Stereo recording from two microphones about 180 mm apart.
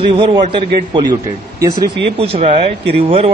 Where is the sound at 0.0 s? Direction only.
30° right (ahead or behind).